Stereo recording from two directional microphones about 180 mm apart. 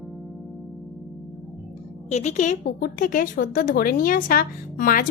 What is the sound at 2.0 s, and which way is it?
A woman's voice, 40° left (ahead or behind).